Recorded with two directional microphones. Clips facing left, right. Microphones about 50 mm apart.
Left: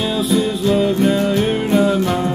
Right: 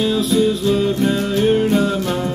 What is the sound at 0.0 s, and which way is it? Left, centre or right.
Music, centre.